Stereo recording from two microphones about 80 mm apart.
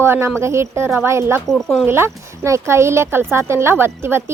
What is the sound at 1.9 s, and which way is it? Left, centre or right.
A woman's voice, right.